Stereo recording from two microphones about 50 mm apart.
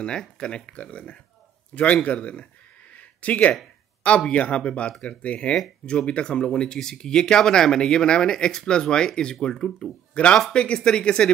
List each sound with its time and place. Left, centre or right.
0.0 s a man's voice: centre
3.0 s a sound: left
4.3 s speech: left